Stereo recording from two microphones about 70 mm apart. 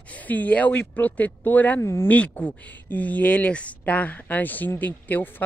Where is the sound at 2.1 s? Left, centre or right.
Centre.